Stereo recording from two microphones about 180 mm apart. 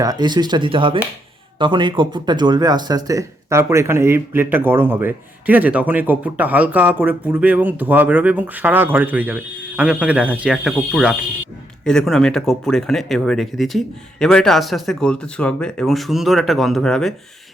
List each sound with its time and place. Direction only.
0.0 s speech: 20° right (ahead or behind); by 17.2 s 5° left (ahead or behind)